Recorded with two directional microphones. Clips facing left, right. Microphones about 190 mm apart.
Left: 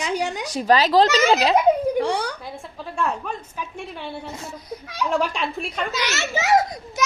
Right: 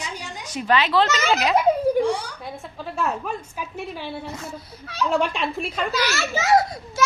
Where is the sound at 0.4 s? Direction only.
35° left (ahead or behind).